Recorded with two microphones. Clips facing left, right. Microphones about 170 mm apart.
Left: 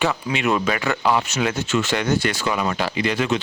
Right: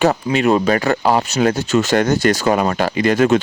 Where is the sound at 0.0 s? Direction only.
40° right (ahead or behind).